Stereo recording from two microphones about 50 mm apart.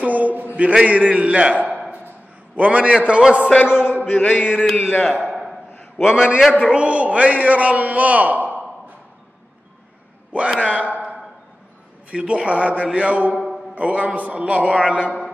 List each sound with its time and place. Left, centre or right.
0.0 s a sound: right
0.6 s a man's voice: right
3.6 s chant: centre
4.2 s mantra: left
4.5 s speech: centre
5.3 s a sound: centre
5.9 s a man's voice: centre; by 8.5 s right
10.3 s a man's voice: right